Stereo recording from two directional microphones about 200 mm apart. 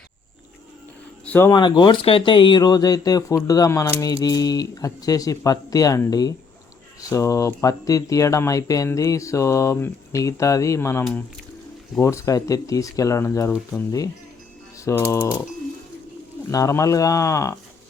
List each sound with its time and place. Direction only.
1.2 s speech: 10° left (ahead or behind)
16.5 s speech: 15° left (ahead or behind)